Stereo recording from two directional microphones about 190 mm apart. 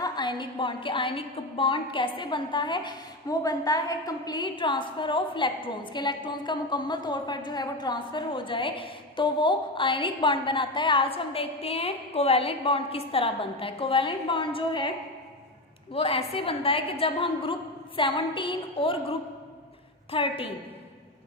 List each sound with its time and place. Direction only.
0.0 s a woman's voice: 25° left (ahead or behind)
16.0 s a woman's voice: 30° left (ahead or behind)